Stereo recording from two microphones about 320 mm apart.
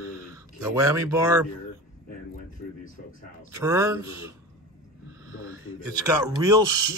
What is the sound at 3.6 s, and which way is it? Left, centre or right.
Speech, centre.